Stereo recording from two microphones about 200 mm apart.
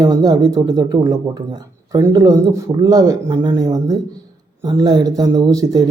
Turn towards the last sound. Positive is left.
turn(degrees=-15)  # may be behind; listen again after turning